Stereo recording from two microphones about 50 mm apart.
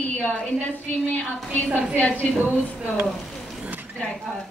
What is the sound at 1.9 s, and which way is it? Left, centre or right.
Speech, left.